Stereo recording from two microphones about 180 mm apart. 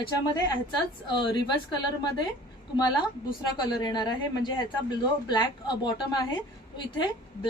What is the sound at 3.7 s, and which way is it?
Speech, 25° left (ahead or behind).